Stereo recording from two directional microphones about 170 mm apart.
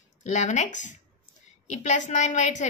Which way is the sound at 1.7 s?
45° left (ahead or behind).